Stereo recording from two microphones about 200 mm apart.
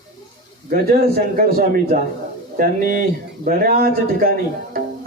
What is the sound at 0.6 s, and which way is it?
Speech, 50° right (ahead or behind).